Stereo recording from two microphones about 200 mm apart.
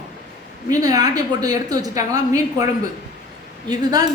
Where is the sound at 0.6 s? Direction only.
20° right (ahead or behind).